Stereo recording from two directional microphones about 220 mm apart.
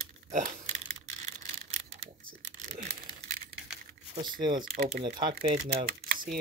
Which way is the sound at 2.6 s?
35° right (ahead or behind).